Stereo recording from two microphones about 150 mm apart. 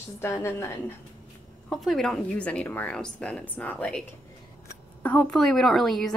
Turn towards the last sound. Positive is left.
turn(degrees=0)  # may be behind; listen again after turning